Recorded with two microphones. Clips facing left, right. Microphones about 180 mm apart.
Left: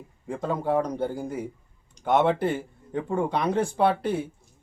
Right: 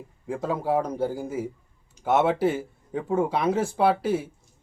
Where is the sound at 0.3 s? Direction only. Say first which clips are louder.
Even; 5° right (ahead or behind).